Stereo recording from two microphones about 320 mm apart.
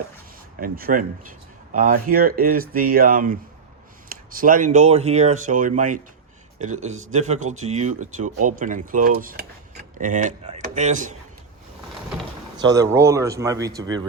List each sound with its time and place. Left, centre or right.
0.6 s speech: right
12.7 s speech: centre